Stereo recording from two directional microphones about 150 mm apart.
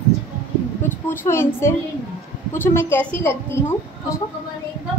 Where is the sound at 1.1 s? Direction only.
15° left (ahead or behind).